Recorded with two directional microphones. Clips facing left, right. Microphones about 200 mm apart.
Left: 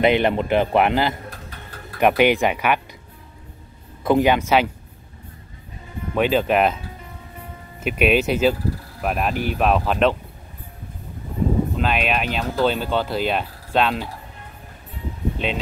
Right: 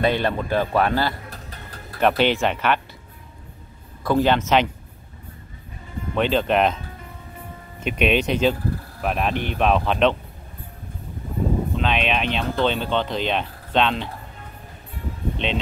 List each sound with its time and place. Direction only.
0.0 s a man's voice: 20° left (ahead or behind)
4.0 s speech: 15° left (ahead or behind)
6.1 s speech: 10° left (ahead or behind)
7.8 s speech: 5° left (ahead or behind)
11.7 s speech: 5° left (ahead or behind)
15.3 s speech: 5° left (ahead or behind)